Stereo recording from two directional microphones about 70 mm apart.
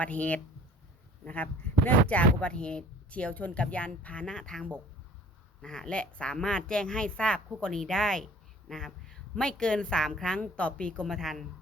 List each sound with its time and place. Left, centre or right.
0.0 s speech: centre
11.0 s speech: centre